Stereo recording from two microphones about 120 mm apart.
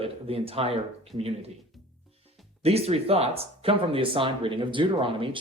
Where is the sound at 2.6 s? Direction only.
60° right (ahead or behind).